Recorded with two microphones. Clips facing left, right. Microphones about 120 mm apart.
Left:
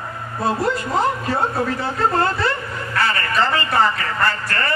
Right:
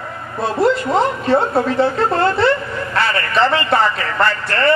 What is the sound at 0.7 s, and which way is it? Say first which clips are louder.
A man's voice: right 4 dB; 25° right (ahead or behind).